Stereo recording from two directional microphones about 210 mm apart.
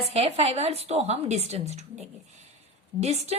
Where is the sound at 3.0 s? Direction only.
30° right (ahead or behind).